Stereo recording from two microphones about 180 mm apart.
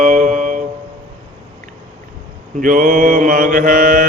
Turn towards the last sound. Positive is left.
turn(degrees=-50)  # may be behind; listen again after turning